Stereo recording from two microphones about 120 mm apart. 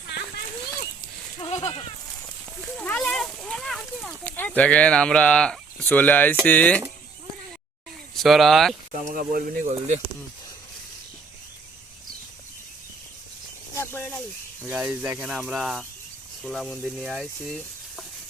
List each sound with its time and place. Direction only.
1.5 s goat: 65° left (ahead or behind)
2.7 s a sound: 10° left (ahead or behind)
6.4 s speech: 10° left (ahead or behind)
8.1 s speech: centre (ahead or behind)
8.9 s speech: 80° right
13.7 s a sound: 20° left (ahead or behind)
14.7 s speech: 15° right (ahead or behind)
15.2 s sizzle: 10° right (ahead or behind)